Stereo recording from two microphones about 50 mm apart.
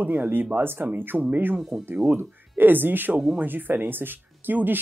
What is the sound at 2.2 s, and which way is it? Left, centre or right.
Speech, right.